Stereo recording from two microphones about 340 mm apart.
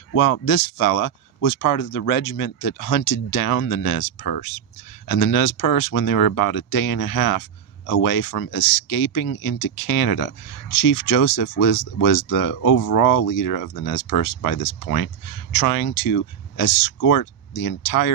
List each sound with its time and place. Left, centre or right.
0.1 s speech: left